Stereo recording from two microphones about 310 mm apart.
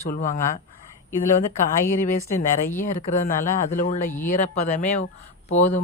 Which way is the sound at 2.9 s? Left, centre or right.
Left.